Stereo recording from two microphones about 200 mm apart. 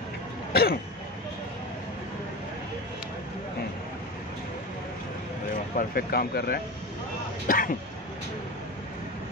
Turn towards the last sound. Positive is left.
turn(degrees=45)  # may be behind; listen again after turning